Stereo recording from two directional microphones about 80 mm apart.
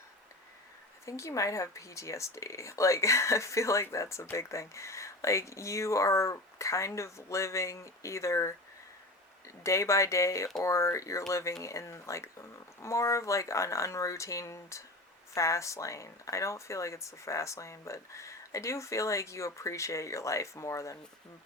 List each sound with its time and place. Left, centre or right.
1.0 s speech: left
9.6 s speech: left